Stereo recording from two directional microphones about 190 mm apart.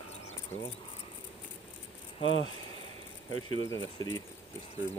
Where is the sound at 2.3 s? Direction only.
90° left.